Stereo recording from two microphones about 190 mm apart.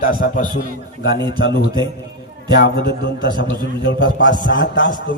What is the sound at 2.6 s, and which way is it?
Speech, 55° left (ahead or behind).